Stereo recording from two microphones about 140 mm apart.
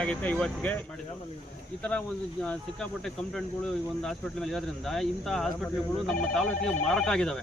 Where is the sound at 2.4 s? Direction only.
5° left (ahead or behind).